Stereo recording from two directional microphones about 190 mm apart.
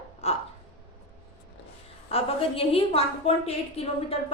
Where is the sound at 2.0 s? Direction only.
30° left (ahead or behind).